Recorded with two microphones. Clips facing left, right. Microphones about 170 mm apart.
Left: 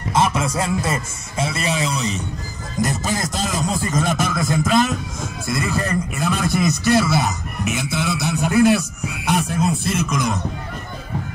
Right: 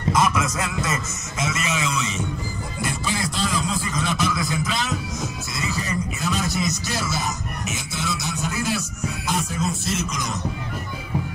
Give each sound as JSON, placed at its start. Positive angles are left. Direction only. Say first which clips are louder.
{"t": 0.1, "sound": "a man's voice", "louder": "left 2 dB", "side_deg": 30}